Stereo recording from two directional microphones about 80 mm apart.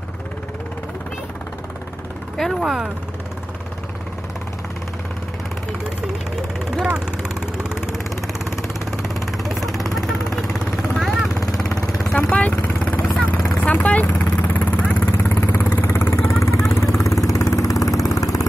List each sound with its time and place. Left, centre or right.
2.3 s speech: centre
6.7 s vehicle: centre
9.1 s vehicle: centre
12.2 s vehicle: centre
13.1 s vehicle: centre
13.7 s vehicle: centre; by 18.4 s left